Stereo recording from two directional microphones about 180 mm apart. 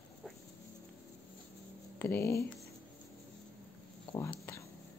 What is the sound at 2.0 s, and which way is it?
Speech, 15° left (ahead or behind).